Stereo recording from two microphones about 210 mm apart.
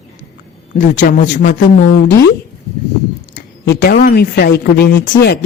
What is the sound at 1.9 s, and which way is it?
Speech, 55° left (ahead or behind).